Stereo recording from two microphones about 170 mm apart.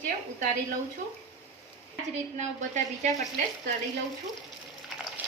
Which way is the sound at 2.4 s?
45° right (ahead or behind).